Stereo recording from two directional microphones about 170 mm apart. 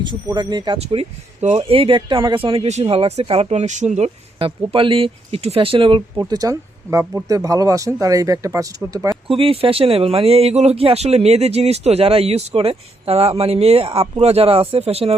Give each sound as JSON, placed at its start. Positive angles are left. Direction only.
{"t": 0.0, "sound": "speech", "side_deg": -25}
{"t": 7.0, "sound": "speech", "side_deg": -5}
{"t": 7.3, "sound": "speech", "side_deg": -20}
{"t": 9.2, "sound": "speech", "side_deg": -35}